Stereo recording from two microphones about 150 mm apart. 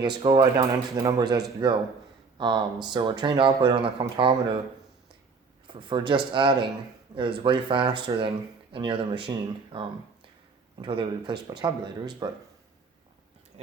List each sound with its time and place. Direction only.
0.0 s speech: 30° right (ahead or behind)
5.6 s speech: 35° right (ahead or behind)